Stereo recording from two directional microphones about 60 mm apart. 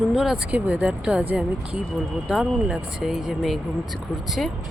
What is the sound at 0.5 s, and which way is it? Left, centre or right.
Speech, right.